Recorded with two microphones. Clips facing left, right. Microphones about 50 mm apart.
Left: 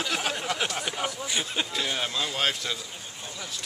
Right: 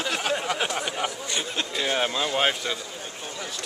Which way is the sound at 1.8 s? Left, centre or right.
Right.